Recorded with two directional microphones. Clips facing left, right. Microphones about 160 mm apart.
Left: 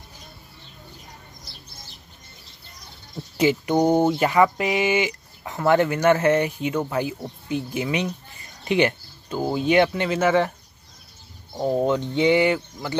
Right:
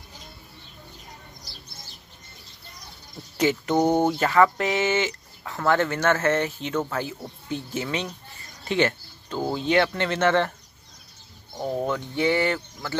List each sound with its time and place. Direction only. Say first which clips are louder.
3.3 s speech: left 2 dB; 10° left (ahead or behind)
11.5 s speech: left 5 dB; 25° left (ahead or behind)